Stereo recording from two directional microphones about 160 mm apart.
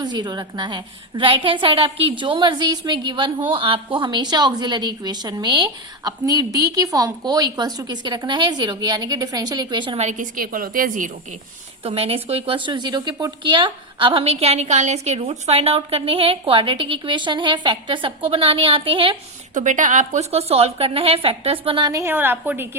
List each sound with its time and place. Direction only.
0.0 s a woman's voice: 25° right (ahead or behind)
10.1 s a woman's voice: 55° right (ahead or behind)
11.8 s a woman's voice: 35° right (ahead or behind)
19.5 s a woman's voice: 50° right (ahead or behind); by 22.7 s 15° right (ahead or behind)